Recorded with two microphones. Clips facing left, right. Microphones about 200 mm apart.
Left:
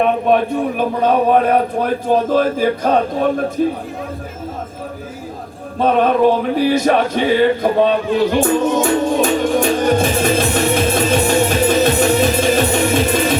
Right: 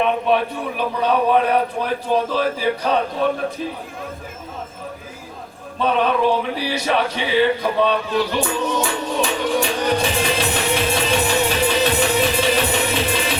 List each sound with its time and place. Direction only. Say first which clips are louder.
0.0 s a man's voice: left 4 dB; 45° left (ahead or behind)
5.8 s music: left 5 dB; 45° left (ahead or behind)